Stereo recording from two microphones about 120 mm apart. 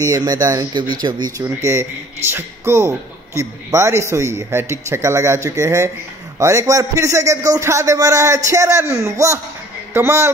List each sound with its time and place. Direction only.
0.0 s speech: 30° right (ahead or behind)
1.4 s a man's voice: 25° right (ahead or behind)